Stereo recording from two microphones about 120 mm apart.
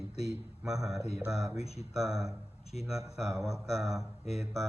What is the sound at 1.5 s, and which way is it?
Speech, 60° left (ahead or behind).